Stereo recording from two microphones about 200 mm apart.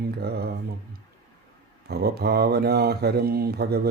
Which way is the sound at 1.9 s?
55° right (ahead or behind).